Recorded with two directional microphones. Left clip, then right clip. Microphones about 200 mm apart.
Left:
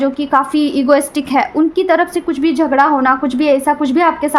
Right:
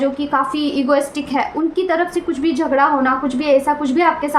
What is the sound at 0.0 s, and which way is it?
A woman's voice, 40° left (ahead or behind).